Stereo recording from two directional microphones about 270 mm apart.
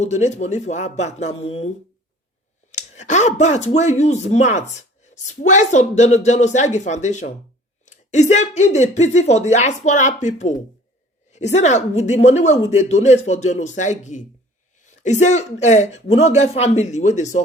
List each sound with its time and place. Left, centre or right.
0.0 s speech: left
2.7 s speech: left
11.5 s speech: left